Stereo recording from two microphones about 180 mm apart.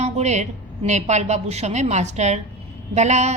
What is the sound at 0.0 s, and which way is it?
A woman's voice, 40° right (ahead or behind).